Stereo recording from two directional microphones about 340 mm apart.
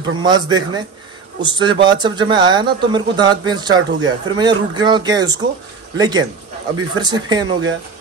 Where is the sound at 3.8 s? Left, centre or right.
Right.